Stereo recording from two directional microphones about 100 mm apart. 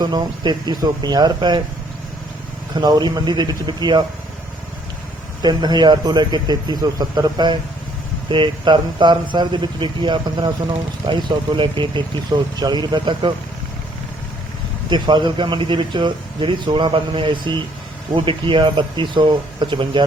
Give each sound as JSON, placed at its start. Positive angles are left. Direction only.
{"t": 0.0, "sound": "speech", "side_deg": -45}
{"t": 2.7, "sound": "speech", "side_deg": -45}
{"t": 5.4, "sound": "speech", "side_deg": -45}
{"t": 14.8, "sound": "speech", "side_deg": -50}